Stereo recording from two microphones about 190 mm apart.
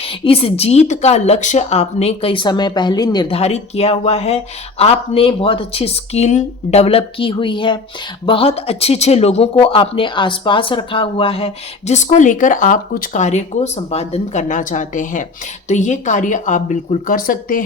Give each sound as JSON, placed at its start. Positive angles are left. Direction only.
{"t": 0.0, "sound": "speech", "side_deg": 30}